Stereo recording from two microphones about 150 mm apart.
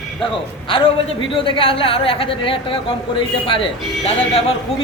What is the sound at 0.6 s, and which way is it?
A woman's voice, 35° left (ahead or behind).